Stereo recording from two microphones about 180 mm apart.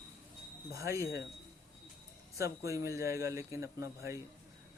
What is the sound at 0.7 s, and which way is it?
Speech, 15° right (ahead or behind).